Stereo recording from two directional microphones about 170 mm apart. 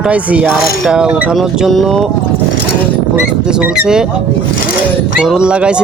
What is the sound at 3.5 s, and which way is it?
Speech, 5° right (ahead or behind).